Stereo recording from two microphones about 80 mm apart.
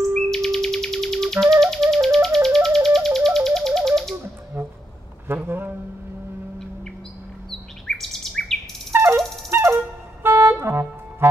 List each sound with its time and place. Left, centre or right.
0.1 s music: centre
4.6 s music: right
5.3 s a sound: right
7.8 s bird: centre
8.9 s dog: right
10.2 s music: right